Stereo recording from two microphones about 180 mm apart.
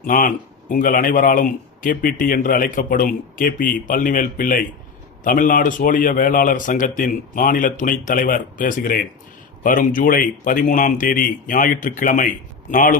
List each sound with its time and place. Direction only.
0.0 s speech: 50° left (ahead or behind)